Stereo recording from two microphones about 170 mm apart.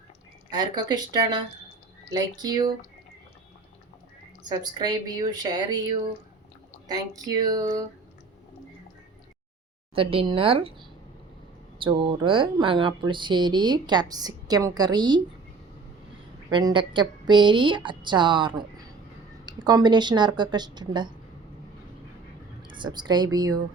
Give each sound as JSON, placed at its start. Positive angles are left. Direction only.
{"t": 0.5, "sound": "speech", "side_deg": -25}
{"t": 4.4, "sound": "speech", "side_deg": -25}
{"t": 6.8, "sound": "speech", "side_deg": -20}
{"t": 9.9, "sound": "speech", "side_deg": -35}
{"t": 16.5, "sound": "speech", "side_deg": -25}
{"t": 22.6, "sound": "speech", "side_deg": -25}